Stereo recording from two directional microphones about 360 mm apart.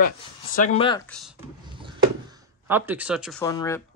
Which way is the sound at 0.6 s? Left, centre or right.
Centre.